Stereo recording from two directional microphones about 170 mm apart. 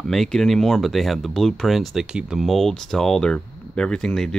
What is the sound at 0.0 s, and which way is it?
Speech, centre (ahead or behind).